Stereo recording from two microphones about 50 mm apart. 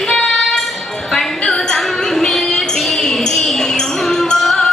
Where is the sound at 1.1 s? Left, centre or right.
Centre.